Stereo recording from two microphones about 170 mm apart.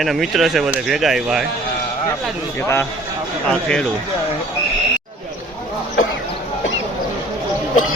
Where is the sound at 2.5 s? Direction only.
15° left (ahead or behind).